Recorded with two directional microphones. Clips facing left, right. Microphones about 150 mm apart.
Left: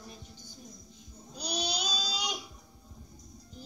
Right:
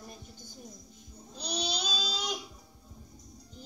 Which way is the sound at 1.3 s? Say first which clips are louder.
Even; centre (ahead or behind).